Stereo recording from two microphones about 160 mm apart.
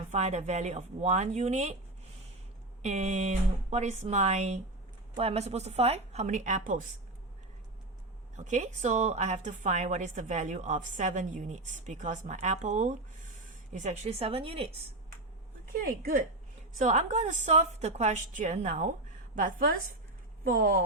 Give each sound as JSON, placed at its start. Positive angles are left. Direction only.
{"t": 0.1, "sound": "a woman's voice", "side_deg": -45}
{"t": 2.8, "sound": "a woman's voice", "side_deg": -45}
{"t": 8.4, "sound": "a woman's voice", "side_deg": -50}
{"t": 16.7, "sound": "a woman's voice", "side_deg": -45}